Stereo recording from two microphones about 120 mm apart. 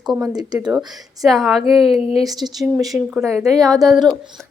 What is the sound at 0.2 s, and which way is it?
Speech, 35° right (ahead or behind).